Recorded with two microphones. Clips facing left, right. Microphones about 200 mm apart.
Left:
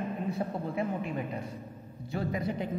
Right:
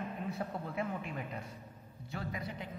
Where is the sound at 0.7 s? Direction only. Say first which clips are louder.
Left 6 dB; 35° left (ahead or behind).